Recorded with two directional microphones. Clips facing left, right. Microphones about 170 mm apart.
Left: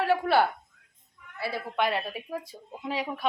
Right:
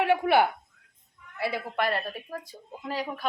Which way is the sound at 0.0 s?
15° right (ahead or behind).